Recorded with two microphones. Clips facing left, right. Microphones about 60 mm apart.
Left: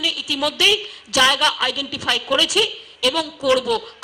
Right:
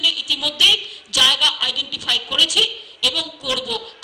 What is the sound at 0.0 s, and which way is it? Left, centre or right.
A woman's voice, left.